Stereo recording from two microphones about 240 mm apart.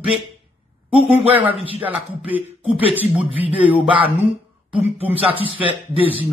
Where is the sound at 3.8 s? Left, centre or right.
Right.